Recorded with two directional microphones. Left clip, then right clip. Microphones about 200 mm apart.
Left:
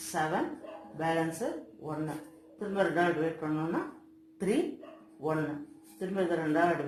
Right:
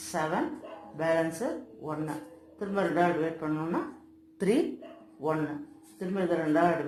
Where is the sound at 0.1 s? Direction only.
20° right (ahead or behind).